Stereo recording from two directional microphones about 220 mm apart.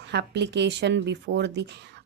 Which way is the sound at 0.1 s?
50° right (ahead or behind).